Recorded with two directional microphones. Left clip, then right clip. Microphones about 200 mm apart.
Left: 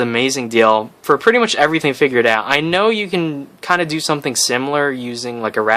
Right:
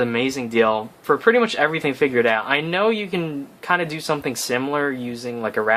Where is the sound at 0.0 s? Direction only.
45° left (ahead or behind).